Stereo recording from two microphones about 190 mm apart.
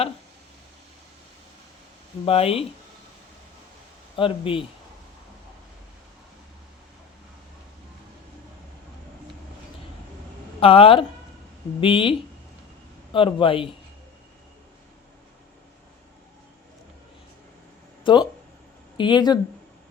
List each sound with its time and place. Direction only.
2.2 s speech: 30° left (ahead or behind)
4.2 s a man's voice: 30° left (ahead or behind)
10.6 s a man's voice: 30° left (ahead or behind)
13.1 s a man's voice: 25° left (ahead or behind)
18.0 s a man's voice: 25° left (ahead or behind)